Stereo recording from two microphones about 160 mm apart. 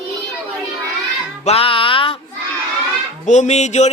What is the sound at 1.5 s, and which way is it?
Music, 35° left (ahead or behind).